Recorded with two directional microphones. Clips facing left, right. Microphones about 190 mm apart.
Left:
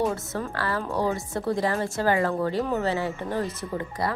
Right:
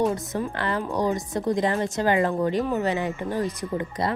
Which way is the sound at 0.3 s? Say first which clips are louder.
Right 2 dB; 20° right (ahead or behind).